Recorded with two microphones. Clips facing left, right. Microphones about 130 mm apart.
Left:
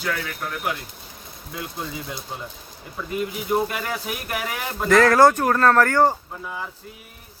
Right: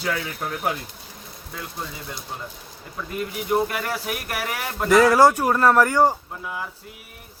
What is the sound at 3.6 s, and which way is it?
Speech, 5° right (ahead or behind).